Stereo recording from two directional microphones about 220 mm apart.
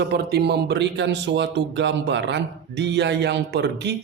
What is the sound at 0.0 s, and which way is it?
A man's voice, 50° right (ahead or behind).